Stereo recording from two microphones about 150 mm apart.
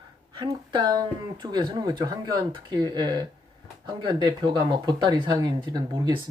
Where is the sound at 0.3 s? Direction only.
30° right (ahead or behind).